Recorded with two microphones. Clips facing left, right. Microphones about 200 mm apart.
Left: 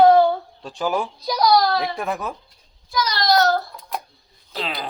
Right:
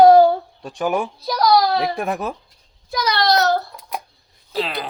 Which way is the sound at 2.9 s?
65° right (ahead or behind).